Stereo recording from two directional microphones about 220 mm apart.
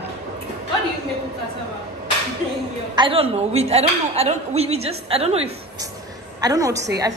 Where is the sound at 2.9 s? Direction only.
25° right (ahead or behind).